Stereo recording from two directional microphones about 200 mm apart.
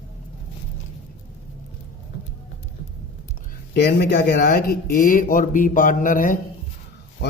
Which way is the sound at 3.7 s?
55° left (ahead or behind).